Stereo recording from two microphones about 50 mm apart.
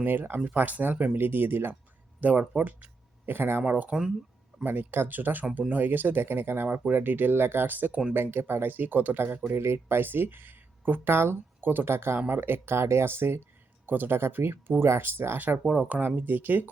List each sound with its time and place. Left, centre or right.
0.0 s speech: right
0.3 s speech: right
2.2 s speech: right
3.2 s speech: right
3.7 s speech: right
4.6 s speech: right
9.5 s speech: right
13.8 s speech: right
15.5 s speech: right
16.1 s speech: right